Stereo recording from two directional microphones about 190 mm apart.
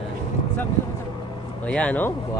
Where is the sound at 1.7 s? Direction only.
5° left (ahead or behind).